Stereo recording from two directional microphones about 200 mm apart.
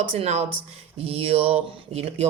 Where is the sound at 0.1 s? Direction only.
30° right (ahead or behind).